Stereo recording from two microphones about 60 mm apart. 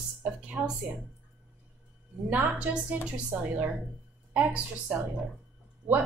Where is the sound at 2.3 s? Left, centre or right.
Right.